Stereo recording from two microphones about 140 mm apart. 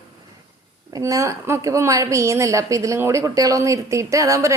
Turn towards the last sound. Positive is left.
turn(degrees=-25)  # may be behind; listen again after turning